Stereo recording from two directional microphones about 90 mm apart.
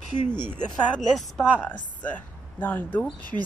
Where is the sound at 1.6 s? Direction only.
15° left (ahead or behind).